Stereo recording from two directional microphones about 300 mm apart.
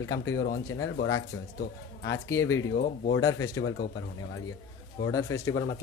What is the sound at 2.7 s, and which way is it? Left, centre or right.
Speech, left.